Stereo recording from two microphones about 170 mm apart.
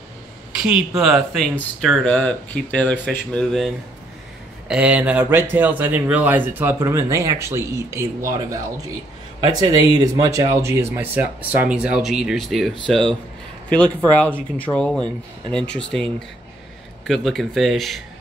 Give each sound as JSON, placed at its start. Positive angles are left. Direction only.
{"t": 0.6, "sound": "speech", "side_deg": -5}